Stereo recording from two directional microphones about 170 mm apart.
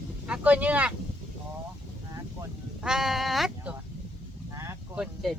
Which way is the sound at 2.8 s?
5° right (ahead or behind).